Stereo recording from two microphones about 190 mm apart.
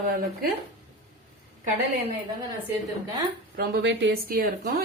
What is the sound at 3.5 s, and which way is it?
A woman's voice, 60° right (ahead or behind).